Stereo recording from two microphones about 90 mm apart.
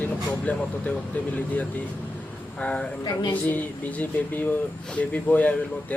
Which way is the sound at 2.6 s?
15° left (ahead or behind).